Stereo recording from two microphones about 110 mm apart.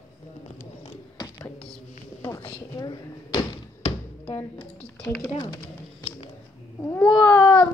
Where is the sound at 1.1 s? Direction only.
35° left (ahead or behind).